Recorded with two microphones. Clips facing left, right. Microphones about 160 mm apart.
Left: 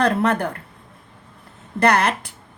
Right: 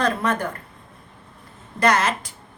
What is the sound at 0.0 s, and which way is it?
Speech, 65° left (ahead or behind).